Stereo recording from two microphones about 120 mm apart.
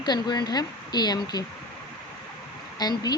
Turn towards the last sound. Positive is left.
turn(degrees=35)  # may be behind; listen again after turning